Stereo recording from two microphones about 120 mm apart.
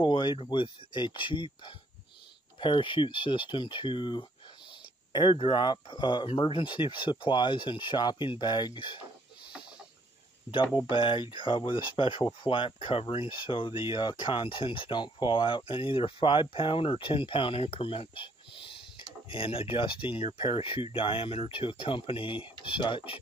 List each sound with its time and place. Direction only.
0.0 s speech: 40° left (ahead or behind)
10.8 s speech: 40° left (ahead or behind)